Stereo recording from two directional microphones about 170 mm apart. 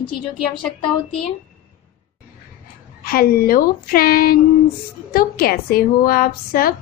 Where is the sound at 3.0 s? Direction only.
60° left (ahead or behind).